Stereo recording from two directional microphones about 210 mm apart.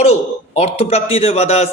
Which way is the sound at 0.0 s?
30° left (ahead or behind).